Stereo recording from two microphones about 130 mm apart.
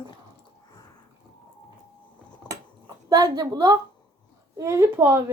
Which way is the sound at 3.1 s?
30° right (ahead or behind).